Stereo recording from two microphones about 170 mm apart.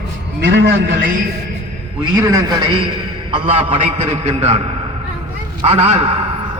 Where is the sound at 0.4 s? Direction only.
90° right.